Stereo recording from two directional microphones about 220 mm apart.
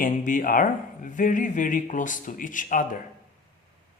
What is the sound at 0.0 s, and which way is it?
Speech, 35° left (ahead or behind).